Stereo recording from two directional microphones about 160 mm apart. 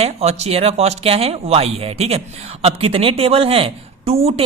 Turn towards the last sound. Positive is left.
turn(degrees=-40)  # may be behind; listen again after turning